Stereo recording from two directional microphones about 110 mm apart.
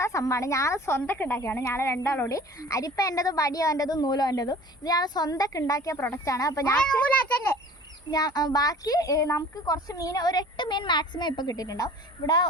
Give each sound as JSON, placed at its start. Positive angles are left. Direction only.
{"t": 0.0, "sound": "speech", "side_deg": 30}
{"t": 6.7, "sound": "a child's voice", "side_deg": 10}
{"t": 8.1, "sound": "speech", "side_deg": 40}